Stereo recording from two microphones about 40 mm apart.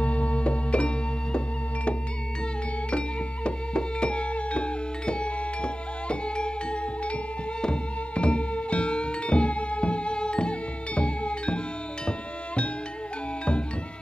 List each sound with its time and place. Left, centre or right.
0.0 s music: left
3.4 s music: left